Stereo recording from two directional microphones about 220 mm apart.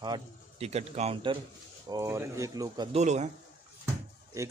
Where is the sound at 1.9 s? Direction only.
15° right (ahead or behind); by 3.3 s 30° right (ahead or behind).